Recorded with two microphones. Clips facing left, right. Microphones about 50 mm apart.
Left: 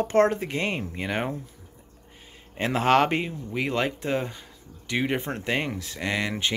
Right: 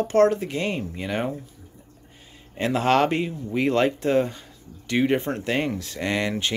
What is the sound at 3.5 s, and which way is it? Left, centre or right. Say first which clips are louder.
Speech: right 6 dB; centre.